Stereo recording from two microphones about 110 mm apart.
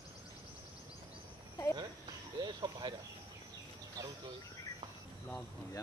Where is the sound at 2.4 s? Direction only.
40° right (ahead or behind).